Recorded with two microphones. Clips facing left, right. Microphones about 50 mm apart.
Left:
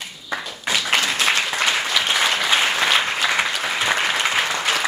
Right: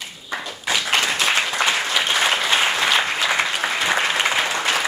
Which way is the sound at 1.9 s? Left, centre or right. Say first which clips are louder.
Even; centre.